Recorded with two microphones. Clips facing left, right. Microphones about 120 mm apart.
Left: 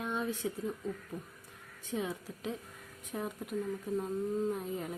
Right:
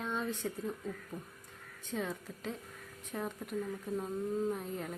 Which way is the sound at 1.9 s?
10° left (ahead or behind).